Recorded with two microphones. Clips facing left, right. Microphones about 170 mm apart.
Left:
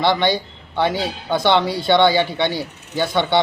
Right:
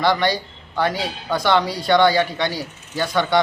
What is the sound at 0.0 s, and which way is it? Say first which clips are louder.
Speech: left 1 dB; 25° left (ahead or behind).